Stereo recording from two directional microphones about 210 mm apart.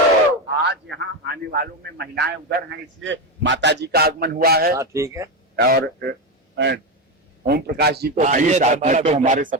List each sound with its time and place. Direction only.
0.6 s a man's voice: 55° right (ahead or behind)
4.8 s speech: 15° right (ahead or behind)
5.5 s a man's voice: 50° right (ahead or behind)
7.4 s a man's voice: 50° right (ahead or behind)
8.1 s a man's voice: 35° right (ahead or behind)